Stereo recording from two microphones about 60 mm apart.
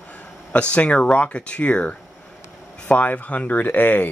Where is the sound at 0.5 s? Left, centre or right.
Left.